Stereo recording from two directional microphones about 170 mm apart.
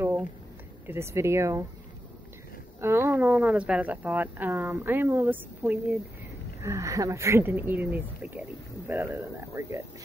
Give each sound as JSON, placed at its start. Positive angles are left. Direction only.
{"t": 0.0, "sound": "a sound", "side_deg": -10}
{"t": 0.8, "sound": "speech", "side_deg": -15}
{"t": 2.8, "sound": "speech", "side_deg": -15}